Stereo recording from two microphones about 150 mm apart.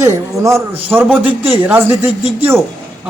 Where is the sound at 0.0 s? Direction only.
20° right (ahead or behind).